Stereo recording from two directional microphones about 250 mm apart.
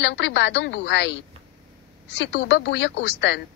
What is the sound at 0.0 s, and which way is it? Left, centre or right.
A woman's voice, left.